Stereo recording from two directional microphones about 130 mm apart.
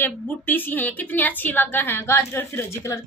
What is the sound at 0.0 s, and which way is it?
A woman's voice, 15° left (ahead or behind).